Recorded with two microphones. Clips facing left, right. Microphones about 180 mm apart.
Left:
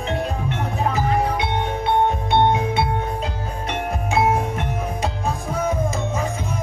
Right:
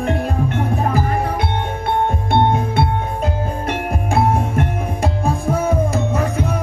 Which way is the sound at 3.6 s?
50° right (ahead or behind).